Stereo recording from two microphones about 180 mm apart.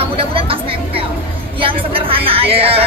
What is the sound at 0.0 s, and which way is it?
Music, 30° right (ahead or behind).